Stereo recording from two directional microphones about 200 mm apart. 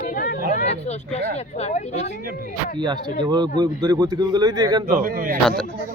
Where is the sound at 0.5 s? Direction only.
35° left (ahead or behind).